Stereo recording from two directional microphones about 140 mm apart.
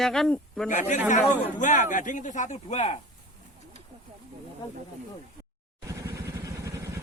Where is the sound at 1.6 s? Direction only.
65° left (ahead or behind).